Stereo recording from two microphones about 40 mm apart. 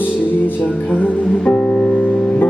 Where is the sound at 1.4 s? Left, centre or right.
Left.